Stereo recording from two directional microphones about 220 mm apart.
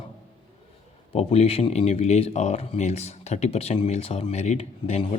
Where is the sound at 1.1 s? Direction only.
25° left (ahead or behind).